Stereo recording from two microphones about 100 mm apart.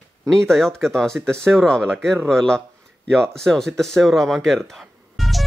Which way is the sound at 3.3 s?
5° left (ahead or behind).